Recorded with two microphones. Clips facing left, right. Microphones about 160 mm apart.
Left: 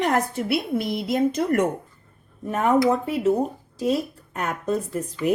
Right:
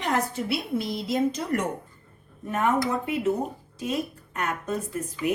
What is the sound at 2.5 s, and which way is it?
Speech, 35° left (ahead or behind).